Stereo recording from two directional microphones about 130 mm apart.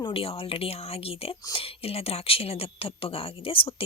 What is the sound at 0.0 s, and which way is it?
Speech, 45° left (ahead or behind).